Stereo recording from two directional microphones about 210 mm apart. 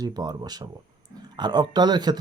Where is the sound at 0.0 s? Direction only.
20° right (ahead or behind).